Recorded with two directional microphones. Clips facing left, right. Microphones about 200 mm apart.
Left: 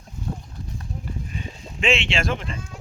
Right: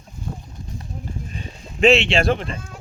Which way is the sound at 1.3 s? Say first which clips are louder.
Even; 40° right (ahead or behind).